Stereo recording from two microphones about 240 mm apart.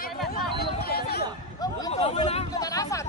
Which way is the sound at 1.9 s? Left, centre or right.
Left.